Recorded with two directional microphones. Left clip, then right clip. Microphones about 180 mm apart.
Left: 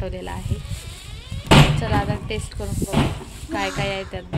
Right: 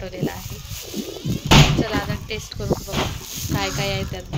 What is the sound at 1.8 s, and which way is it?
Speech, 10° left (ahead or behind).